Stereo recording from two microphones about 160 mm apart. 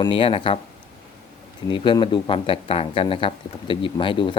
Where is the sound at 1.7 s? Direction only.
30° left (ahead or behind).